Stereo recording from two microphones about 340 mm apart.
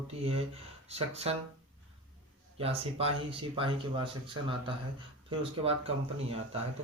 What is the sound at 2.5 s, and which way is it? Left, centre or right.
Speech, centre.